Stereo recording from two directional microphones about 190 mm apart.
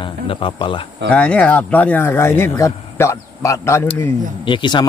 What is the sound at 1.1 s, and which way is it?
A man's voice, 5° left (ahead or behind).